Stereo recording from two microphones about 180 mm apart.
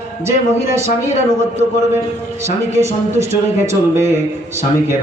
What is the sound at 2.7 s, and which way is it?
Speech, 15° right (ahead or behind).